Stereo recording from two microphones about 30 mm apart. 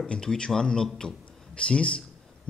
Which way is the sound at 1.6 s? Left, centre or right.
Left.